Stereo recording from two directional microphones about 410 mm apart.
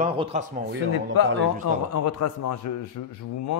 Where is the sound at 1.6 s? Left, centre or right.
Left.